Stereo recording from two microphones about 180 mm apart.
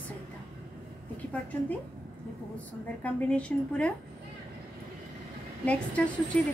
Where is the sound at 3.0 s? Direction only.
5° left (ahead or behind).